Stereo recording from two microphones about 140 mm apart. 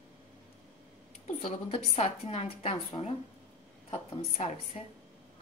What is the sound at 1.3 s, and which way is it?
A woman's voice, 40° left (ahead or behind).